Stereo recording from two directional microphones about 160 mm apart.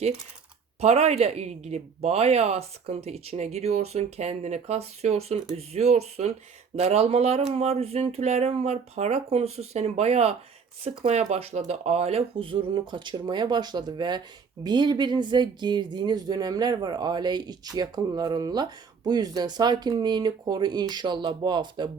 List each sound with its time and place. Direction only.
0.8 s speech: 40° right (ahead or behind)